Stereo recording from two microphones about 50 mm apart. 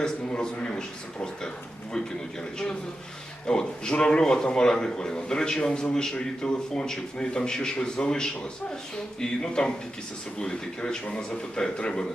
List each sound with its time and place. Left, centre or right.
0.0 s a man's voice: centre
3.4 s a man's voice: centre